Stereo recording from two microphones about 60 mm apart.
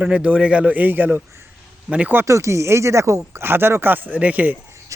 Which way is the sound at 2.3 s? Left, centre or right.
Right.